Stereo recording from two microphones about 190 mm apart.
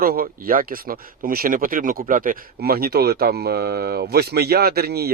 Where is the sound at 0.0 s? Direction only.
50° right (ahead or behind).